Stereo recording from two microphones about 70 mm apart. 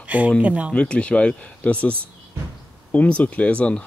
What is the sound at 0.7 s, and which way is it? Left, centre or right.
Speech, centre.